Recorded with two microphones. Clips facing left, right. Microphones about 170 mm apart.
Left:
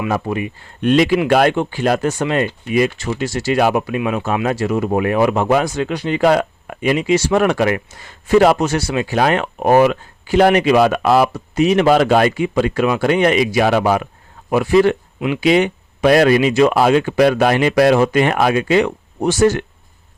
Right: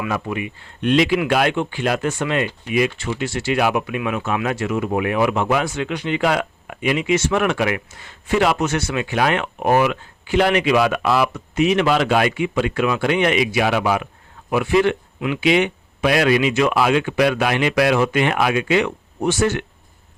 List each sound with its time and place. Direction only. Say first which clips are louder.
0.1 s speech: left 4 dB; 35° left (ahead or behind)